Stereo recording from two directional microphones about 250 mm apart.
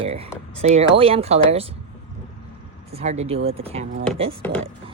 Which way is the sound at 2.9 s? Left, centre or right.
Right.